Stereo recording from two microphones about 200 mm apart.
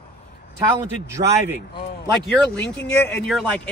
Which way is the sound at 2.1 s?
5° left (ahead or behind).